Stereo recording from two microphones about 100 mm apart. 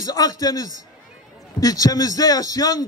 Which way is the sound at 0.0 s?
40° left (ahead or behind).